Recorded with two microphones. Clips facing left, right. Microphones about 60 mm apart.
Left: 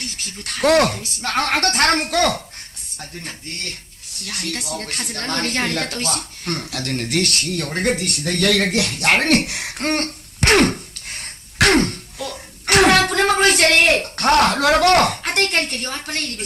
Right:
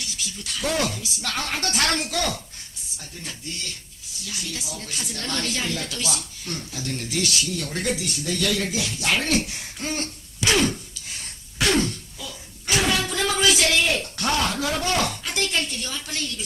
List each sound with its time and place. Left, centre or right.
0.0 s speech: left